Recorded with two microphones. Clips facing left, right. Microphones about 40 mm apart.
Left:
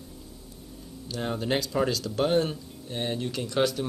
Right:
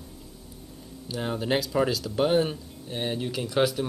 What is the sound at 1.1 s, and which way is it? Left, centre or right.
Speech, centre.